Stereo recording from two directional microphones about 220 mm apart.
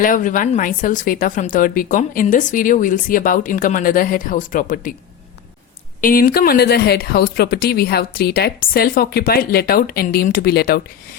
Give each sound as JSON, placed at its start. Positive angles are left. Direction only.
{"t": 0.0, "sound": "speech", "side_deg": 35}
{"t": 6.0, "sound": "speech", "side_deg": 40}